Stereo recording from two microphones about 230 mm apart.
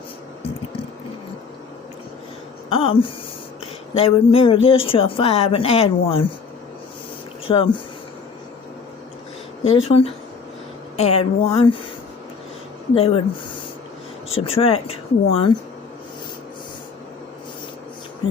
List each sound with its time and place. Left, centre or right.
2.6 s speech: left
7.4 s speech: left
9.6 s speech: left
12.9 s speech: left
14.4 s speech: left